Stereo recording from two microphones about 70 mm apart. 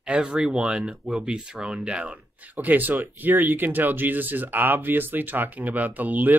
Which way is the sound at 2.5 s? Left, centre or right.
Right.